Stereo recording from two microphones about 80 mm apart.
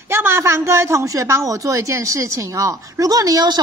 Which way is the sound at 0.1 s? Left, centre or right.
Right.